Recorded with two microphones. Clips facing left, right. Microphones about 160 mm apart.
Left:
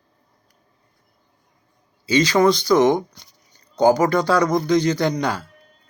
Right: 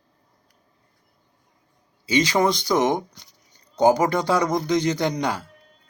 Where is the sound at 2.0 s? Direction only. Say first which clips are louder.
Left 4 dB; 20° right (ahead or behind).